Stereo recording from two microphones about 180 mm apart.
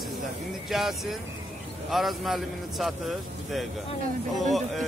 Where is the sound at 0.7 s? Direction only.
Centre (ahead or behind).